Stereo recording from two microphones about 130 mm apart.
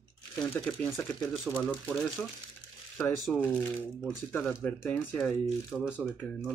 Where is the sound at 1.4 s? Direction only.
5° left (ahead or behind).